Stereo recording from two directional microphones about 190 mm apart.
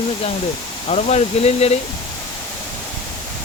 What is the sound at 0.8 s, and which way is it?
Speech, 35° left (ahead or behind).